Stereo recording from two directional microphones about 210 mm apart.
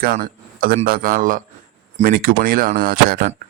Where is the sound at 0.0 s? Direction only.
45° right (ahead or behind).